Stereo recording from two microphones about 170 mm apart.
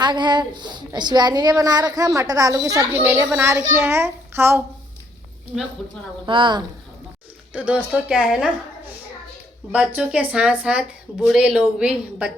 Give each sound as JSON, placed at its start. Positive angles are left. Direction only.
{"t": 0.0, "sound": "a woman's voice", "side_deg": -25}
{"t": 6.2, "sound": "a woman's voice", "side_deg": -30}
{"t": 7.5, "sound": "a woman's voice", "side_deg": -10}
{"t": 9.7, "sound": "speech", "side_deg": -5}